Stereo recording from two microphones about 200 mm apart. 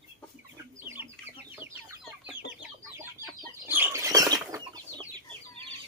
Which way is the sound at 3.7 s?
10° right (ahead or behind).